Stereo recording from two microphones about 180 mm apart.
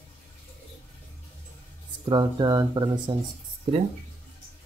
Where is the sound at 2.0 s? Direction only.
25° right (ahead or behind).